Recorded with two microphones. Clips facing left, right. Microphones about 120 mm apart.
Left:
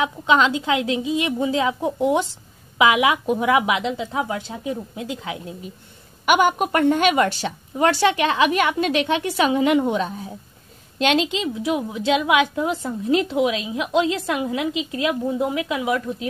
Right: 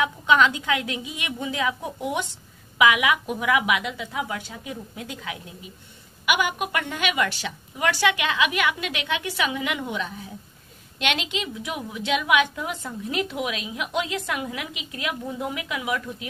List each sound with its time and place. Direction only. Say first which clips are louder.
0.0 s a woman's voice: left 2 dB; 25° left (ahead or behind)
6.2 s a woman's voice: left 7 dB; 45° left (ahead or behind)